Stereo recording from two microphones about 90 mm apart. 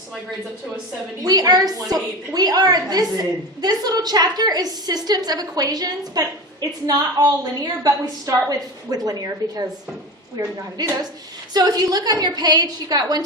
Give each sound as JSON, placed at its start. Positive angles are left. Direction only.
{"t": 1.2, "sound": "a woman's voice", "side_deg": -45}
{"t": 10.8, "sound": "a woman's voice", "side_deg": -50}